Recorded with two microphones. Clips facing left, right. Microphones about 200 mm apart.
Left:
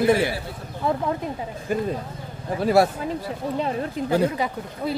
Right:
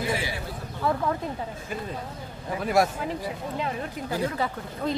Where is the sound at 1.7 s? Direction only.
50° left (ahead or behind).